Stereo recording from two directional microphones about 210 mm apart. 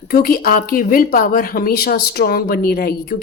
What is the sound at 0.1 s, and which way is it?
Speech, 45° left (ahead or behind).